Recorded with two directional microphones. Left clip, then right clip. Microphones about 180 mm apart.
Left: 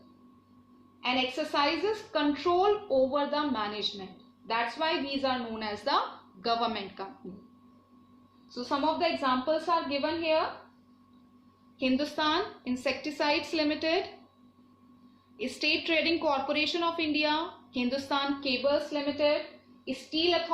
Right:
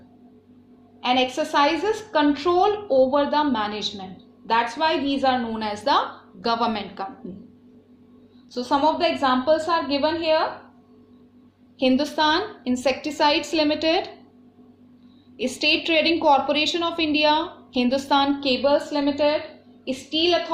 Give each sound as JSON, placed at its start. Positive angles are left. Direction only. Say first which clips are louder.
{"t": 1.0, "sound": "a woman's voice", "louder": "right 8 dB", "side_deg": -50}
{"t": 8.5, "sound": "a woman's voice", "louder": "right 9 dB", "side_deg": -45}
{"t": 11.8, "sound": "a woman's voice", "louder": "right 9 dB", "side_deg": -45}
{"t": 15.4, "sound": "a woman's voice", "louder": "right 8 dB", "side_deg": -45}
{"t": 19.8, "sound": "a woman's voice", "louder": "right 7 dB", "side_deg": -45}